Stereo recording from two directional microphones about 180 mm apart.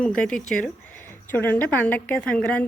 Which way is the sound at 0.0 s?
5° left (ahead or behind).